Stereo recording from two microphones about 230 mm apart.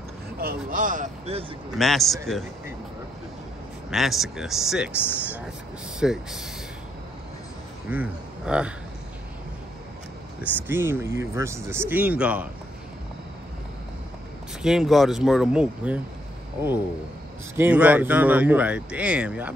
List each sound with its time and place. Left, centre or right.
0.4 s speech: right
1.8 s speech: centre
3.9 s speech: centre
4.9 s speech: centre
5.9 s speech: centre
7.9 s speech: centre
10.4 s speech: centre
14.6 s speech: centre
17.6 s speech: centre